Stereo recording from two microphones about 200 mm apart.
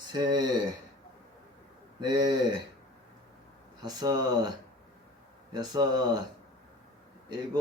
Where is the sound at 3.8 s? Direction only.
20° right (ahead or behind).